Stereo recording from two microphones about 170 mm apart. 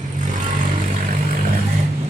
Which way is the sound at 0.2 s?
50° right (ahead or behind).